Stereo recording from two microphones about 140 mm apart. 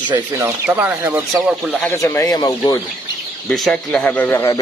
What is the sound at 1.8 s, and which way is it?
Speech, 20° left (ahead or behind).